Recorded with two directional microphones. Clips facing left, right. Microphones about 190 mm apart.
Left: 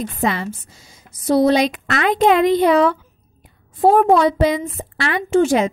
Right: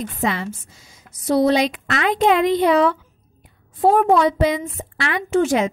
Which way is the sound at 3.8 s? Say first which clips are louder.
Left 2 dB; 35° left (ahead or behind).